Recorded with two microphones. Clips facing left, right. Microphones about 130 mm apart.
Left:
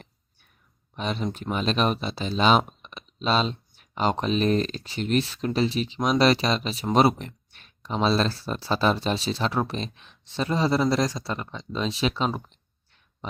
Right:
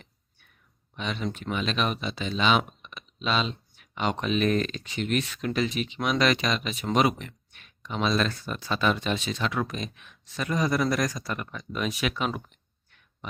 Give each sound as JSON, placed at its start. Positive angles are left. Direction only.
{"t": 0.9, "sound": "speech", "side_deg": 35}